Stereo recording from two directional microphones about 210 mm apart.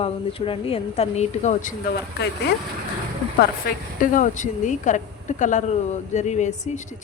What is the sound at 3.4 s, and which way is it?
A woman's voice, 45° left (ahead or behind).